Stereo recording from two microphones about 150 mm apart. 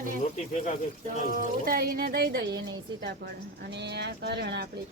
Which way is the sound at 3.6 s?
90° right.